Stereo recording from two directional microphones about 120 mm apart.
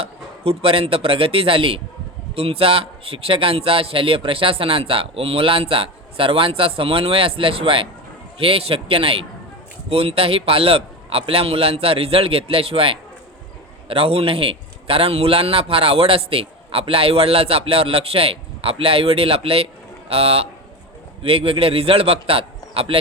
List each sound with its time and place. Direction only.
0.0 s a man's voice: 50° right (ahead or behind)